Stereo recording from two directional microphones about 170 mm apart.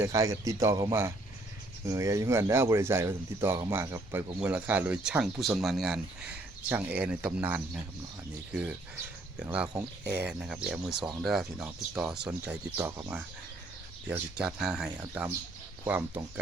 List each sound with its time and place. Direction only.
0.0 s speech: 20° right (ahead or behind)
9.4 s speech: 5° right (ahead or behind)